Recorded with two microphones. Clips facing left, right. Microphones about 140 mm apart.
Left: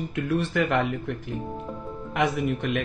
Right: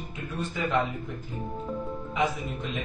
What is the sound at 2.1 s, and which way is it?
Speech, 70° left (ahead or behind).